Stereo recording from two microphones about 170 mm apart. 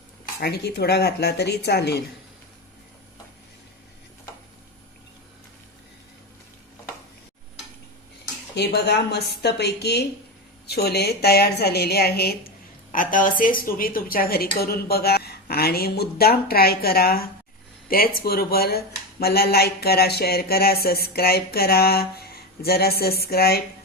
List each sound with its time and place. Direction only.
0.3 s speech: 70° left (ahead or behind)
8.5 s a woman's voice: 75° left (ahead or behind)